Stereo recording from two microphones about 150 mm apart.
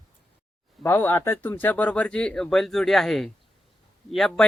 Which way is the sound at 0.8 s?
15° left (ahead or behind).